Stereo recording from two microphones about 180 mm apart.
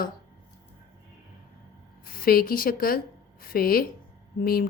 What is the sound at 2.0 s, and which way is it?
A woman's voice, 55° left (ahead or behind).